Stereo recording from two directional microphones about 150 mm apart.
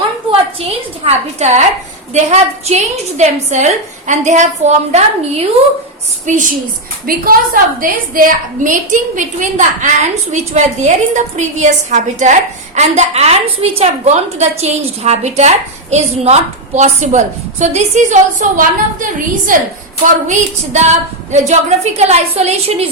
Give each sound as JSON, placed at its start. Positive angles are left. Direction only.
{"t": 0.3, "sound": "a woman's voice", "side_deg": -45}
{"t": 6.2, "sound": "a woman's voice", "side_deg": -60}
{"t": 7.1, "sound": "a woman's voice", "side_deg": -70}
{"t": 20.2, "sound": "a woman's voice", "side_deg": -50}
{"t": 21.9, "sound": "a woman's voice", "side_deg": -45}